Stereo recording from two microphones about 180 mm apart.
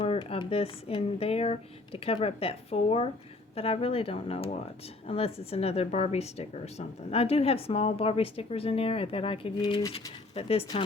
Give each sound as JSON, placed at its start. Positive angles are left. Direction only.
{"t": 0.0, "sound": "a woman's voice", "side_deg": 30}